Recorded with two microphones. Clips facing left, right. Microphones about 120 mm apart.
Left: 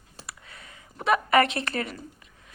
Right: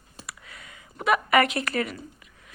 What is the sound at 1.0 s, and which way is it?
Speech, 30° left (ahead or behind).